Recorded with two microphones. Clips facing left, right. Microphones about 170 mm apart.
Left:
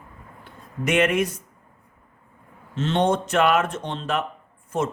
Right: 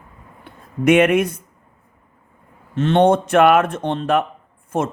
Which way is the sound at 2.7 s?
55° right (ahead or behind).